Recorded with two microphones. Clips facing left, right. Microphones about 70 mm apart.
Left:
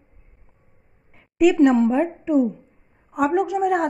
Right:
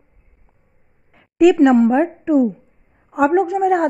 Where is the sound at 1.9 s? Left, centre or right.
Right.